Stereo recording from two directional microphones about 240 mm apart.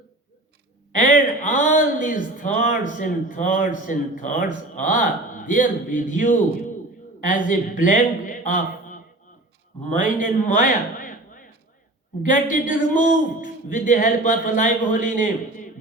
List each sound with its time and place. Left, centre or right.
0.9 s a man's voice: left
10.4 s a sound: left
12.2 s speech: left